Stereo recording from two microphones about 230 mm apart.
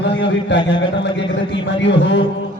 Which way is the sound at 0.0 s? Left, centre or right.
Left.